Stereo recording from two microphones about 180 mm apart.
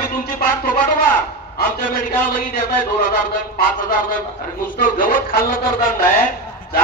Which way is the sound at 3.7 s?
50° left (ahead or behind).